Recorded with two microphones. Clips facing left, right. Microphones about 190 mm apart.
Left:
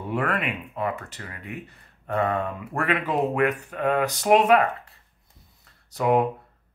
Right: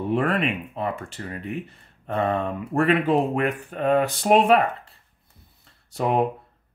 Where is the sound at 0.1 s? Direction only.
25° right (ahead or behind).